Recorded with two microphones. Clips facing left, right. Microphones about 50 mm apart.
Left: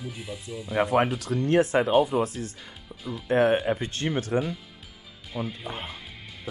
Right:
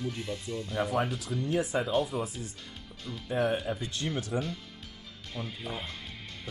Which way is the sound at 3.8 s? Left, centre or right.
Left.